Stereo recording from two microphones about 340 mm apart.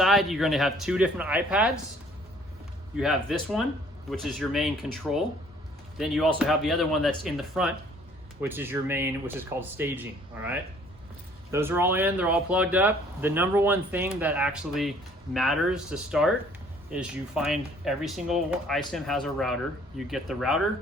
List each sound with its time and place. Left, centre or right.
0.0 s speech: centre
3.0 s speech: centre